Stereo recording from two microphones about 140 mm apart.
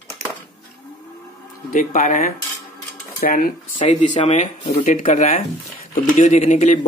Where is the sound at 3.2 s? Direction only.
90° left.